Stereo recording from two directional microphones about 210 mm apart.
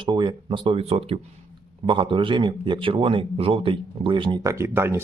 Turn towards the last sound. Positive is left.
turn(degrees=-10)  # may be behind; listen again after turning